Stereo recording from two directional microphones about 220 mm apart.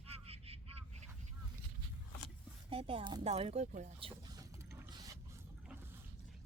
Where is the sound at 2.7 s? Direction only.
25° right (ahead or behind).